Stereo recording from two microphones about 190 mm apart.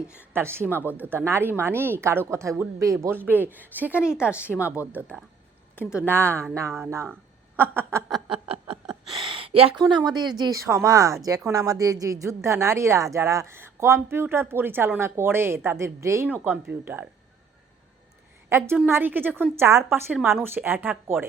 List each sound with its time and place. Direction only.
0.3 s a woman's voice: 10° right (ahead or behind)
8.3 s a sound: 30° right (ahead or behind)
8.9 s a woman's voice: 25° right (ahead or behind); by 17.1 s 10° right (ahead or behind)
18.4 s a woman's voice: 15° right (ahead or behind)